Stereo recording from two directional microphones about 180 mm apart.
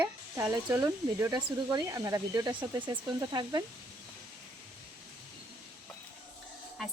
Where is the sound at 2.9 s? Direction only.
25° right (ahead or behind).